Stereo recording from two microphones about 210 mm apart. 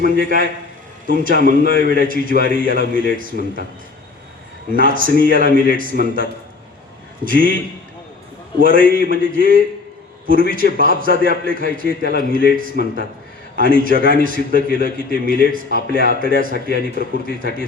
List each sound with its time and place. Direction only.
0.0 s a man's voice: 40° right (ahead or behind)
4.7 s a man's voice: 40° right (ahead or behind)
7.3 s a man's voice: 40° right (ahead or behind)